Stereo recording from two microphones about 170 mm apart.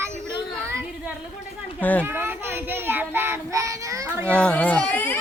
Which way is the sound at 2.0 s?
15° right (ahead or behind).